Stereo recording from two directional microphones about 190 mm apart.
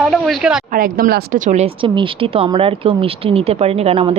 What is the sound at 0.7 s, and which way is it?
Speech, 45° right (ahead or behind).